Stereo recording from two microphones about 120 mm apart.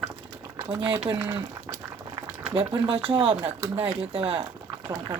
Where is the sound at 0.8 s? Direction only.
45° right (ahead or behind).